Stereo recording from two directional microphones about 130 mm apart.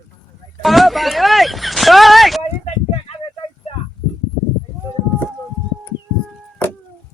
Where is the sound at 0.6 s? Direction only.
Centre (ahead or behind).